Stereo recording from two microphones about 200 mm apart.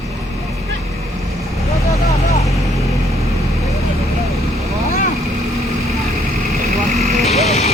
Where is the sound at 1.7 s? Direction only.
15° left (ahead or behind).